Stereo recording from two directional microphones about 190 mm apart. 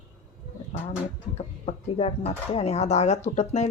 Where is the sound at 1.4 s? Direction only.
35° left (ahead or behind).